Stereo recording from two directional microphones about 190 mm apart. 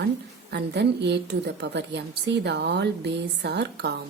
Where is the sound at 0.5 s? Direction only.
60° right (ahead or behind).